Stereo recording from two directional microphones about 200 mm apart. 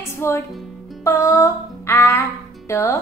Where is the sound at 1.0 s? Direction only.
15° left (ahead or behind).